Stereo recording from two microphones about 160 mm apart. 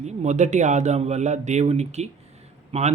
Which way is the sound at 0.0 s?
45° right (ahead or behind).